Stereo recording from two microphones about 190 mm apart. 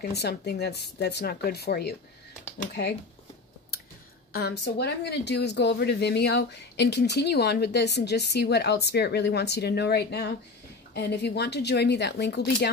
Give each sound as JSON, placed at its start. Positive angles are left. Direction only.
{"t": 0.0, "sound": "speech", "side_deg": 60}
{"t": 4.3, "sound": "speech", "side_deg": 60}